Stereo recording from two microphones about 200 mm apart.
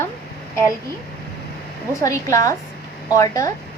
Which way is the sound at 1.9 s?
15° left (ahead or behind).